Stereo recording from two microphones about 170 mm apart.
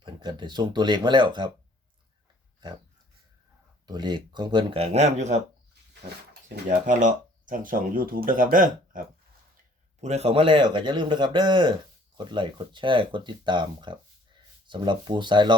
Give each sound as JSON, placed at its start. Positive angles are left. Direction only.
{"t": 0.0, "sound": "speech", "side_deg": -25}
{"t": 3.8, "sound": "speech", "side_deg": -25}
{"t": 6.7, "sound": "speech", "side_deg": -50}
{"t": 10.0, "sound": "speech", "side_deg": -40}